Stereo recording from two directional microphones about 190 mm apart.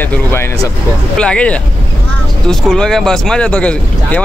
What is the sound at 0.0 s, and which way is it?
Speech, 10° left (ahead or behind).